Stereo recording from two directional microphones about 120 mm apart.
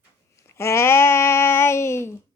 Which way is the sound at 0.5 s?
20° left (ahead or behind).